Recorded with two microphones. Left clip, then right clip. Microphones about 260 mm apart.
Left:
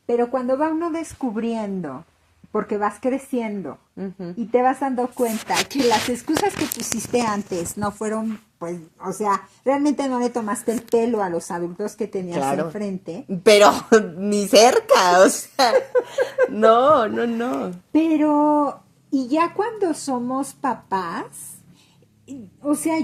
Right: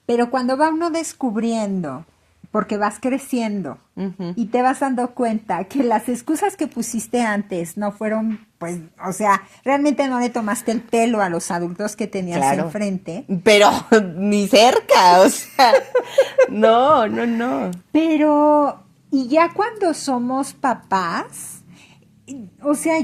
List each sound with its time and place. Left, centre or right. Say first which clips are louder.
0.1 s speech: right 2 dB; right
12.4 s a woman's voice: right 5 dB; right
22.3 s speech: right 3 dB; right